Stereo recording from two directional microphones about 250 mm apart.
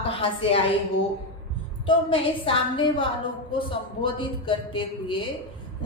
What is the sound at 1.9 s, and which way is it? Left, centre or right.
A woman's voice, left.